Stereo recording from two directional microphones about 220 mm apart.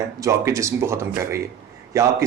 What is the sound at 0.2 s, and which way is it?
Speech, 15° right (ahead or behind).